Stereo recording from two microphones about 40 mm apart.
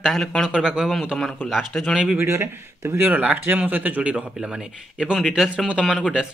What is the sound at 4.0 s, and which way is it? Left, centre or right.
A man's voice, right.